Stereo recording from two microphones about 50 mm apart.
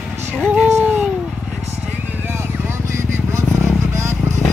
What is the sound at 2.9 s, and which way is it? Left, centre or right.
Vehicle, right.